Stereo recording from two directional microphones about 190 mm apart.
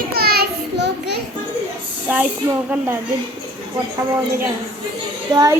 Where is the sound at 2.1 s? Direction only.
10° right (ahead or behind).